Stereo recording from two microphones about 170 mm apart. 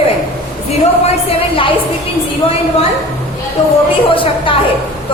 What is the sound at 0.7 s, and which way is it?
A woman's voice, 35° left (ahead or behind).